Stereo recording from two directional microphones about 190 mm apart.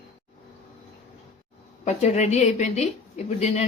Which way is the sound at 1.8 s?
35° left (ahead or behind).